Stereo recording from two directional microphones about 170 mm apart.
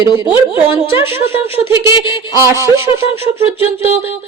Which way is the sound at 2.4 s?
15° right (ahead or behind).